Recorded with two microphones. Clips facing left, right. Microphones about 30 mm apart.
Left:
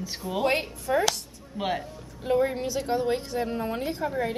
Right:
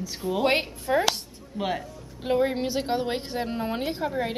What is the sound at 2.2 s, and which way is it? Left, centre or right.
A woman's voice, right.